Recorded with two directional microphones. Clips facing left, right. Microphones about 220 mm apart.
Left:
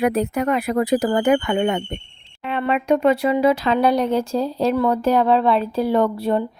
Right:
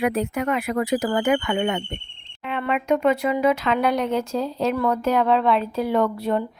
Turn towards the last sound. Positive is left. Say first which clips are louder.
# left 3 dB
turn(degrees=30)  # may be behind; listen again after turning